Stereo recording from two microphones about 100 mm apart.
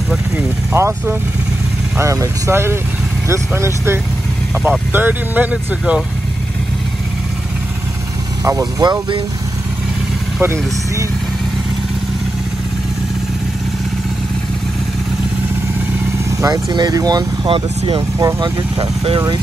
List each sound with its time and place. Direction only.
0.7 s speech: 25° right (ahead or behind)
8.5 s speech: 35° right (ahead or behind)
10.4 s speech: 25° right (ahead or behind)
16.3 s speech: 35° right (ahead or behind)
17.5 s speech: 70° right (ahead or behind)
18.8 s speech: 50° right (ahead or behind)